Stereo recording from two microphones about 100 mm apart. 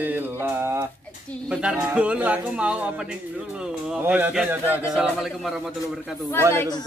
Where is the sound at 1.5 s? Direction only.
5° right (ahead or behind).